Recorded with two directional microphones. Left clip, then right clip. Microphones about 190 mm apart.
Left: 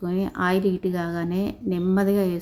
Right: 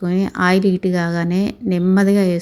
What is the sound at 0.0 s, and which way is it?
Speech, 20° right (ahead or behind).